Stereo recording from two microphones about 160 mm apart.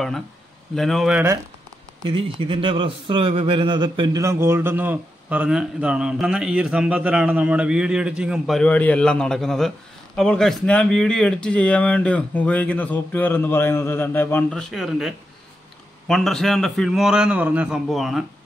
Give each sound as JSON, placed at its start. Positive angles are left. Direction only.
{"t": 0.7, "sound": "a man's voice", "side_deg": 0}
{"t": 2.0, "sound": "speech", "side_deg": -35}
{"t": 4.2, "sound": "a man's voice", "side_deg": -15}